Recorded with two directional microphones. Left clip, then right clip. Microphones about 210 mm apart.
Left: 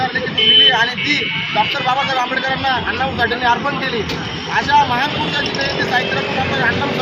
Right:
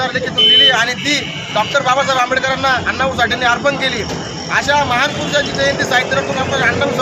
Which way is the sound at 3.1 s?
15° right (ahead or behind).